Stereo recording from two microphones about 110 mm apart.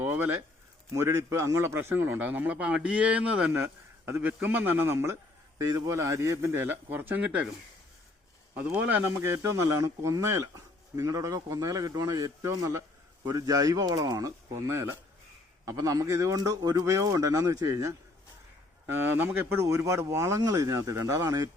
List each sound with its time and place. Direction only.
0.0 s a sound: 20° right (ahead or behind)
0.9 s a man's voice: 25° right (ahead or behind); by 3.5 s 10° right (ahead or behind)
3.5 s speech: 20° right (ahead or behind)
8.5 s speech: 15° right (ahead or behind)
18.9 s speech: 20° right (ahead or behind)